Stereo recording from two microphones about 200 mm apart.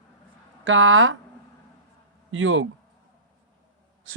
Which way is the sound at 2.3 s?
75° right (ahead or behind).